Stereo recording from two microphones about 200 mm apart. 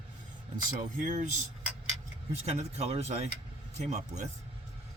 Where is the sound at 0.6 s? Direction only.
40° right (ahead or behind).